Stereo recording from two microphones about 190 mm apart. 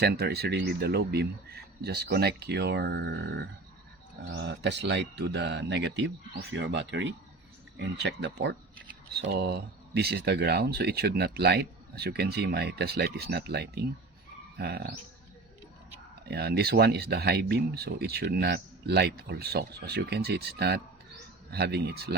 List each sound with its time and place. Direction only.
0.0 s speech: 55° right (ahead or behind)
16.3 s speech: 60° right (ahead or behind)